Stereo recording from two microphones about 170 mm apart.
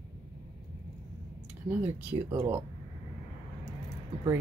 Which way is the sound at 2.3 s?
35° right (ahead or behind).